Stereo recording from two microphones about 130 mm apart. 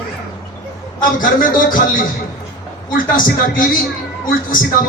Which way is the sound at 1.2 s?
90° left.